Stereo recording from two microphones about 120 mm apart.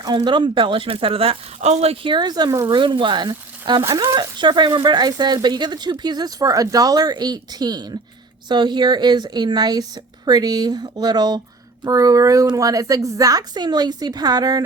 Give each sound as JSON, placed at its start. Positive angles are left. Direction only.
{"t": 0.0, "sound": "speech", "side_deg": -35}
{"t": 2.8, "sound": "a woman's voice", "side_deg": -45}